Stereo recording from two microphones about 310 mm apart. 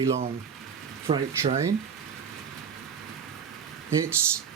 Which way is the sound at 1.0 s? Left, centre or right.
Centre.